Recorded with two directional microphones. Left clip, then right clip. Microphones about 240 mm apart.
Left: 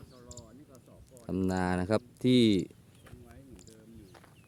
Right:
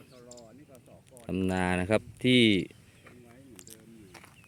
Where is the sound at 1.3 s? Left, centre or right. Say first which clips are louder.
Right 2 dB; centre.